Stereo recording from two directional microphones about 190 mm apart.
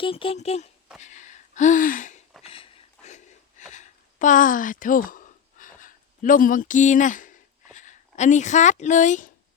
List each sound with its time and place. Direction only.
0.0 s speech: 30° left (ahead or behind)
1.0 s gasp: 40° left (ahead or behind)
2.4 s a sound: 30° left (ahead or behind)